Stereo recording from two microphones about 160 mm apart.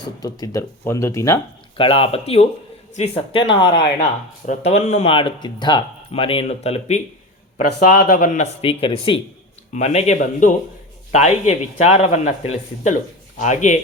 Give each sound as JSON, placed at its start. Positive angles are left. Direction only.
{"t": 0.2, "sound": "speech", "side_deg": 25}
{"t": 1.8, "sound": "speech", "side_deg": 35}
{"t": 4.4, "sound": "speech", "side_deg": 45}
{"t": 8.0, "sound": "speech", "side_deg": 55}
{"t": 8.6, "sound": "speech", "side_deg": 35}
{"t": 9.7, "sound": "speech", "side_deg": 45}